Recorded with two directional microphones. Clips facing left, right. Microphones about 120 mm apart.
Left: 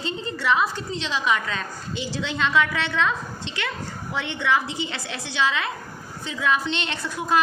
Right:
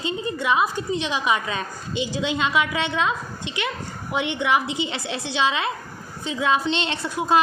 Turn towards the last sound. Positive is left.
turn(degrees=-20)  # may be behind; listen again after turning